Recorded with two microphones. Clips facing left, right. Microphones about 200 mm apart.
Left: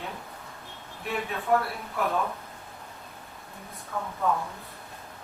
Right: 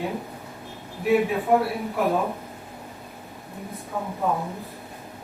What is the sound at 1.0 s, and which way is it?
Speech, 15° right (ahead or behind).